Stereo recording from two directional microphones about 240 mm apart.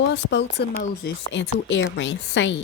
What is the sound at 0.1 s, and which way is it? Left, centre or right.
Speech, left.